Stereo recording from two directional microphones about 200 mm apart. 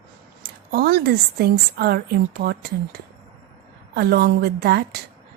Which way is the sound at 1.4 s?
50° right (ahead or behind).